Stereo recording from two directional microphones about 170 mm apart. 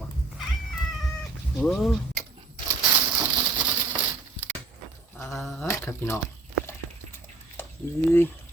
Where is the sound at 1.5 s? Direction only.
Centre (ahead or behind).